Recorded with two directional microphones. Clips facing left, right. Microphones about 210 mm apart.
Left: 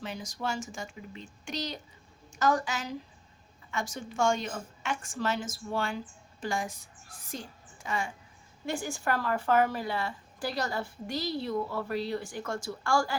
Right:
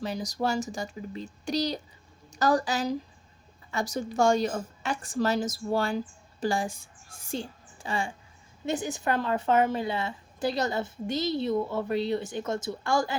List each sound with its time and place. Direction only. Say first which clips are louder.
0.0 s a woman's voice: right 6 dB; 35° right (ahead or behind)
7.3 s music: right 7 dB; 30° right (ahead or behind)
8.6 s a woman's voice: right 3 dB; 20° right (ahead or behind)